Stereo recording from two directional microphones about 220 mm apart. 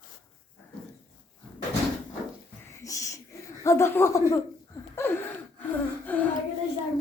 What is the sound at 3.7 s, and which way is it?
Speech, 10° left (ahead or behind).